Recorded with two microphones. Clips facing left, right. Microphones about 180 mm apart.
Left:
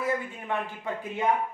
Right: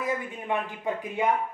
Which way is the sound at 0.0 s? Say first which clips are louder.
Left 1 dB; 15° right (ahead or behind).